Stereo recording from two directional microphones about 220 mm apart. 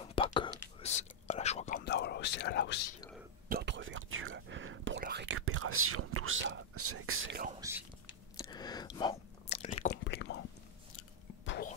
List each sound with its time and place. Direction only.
0.0 s whispering: 25° left (ahead or behind)
1.9 s whispering: 50° left (ahead or behind)
3.4 s whispering: 50° right (ahead or behind)
5.4 s whispering: 70° right (ahead or behind)
6.7 s speech: 90° right; by 7.3 s 70° right (ahead or behind)
7.6 s whispering: 15° right (ahead or behind)
8.4 s chewing: 20° left (ahead or behind)
10.0 s whispering: 50° left (ahead or behind)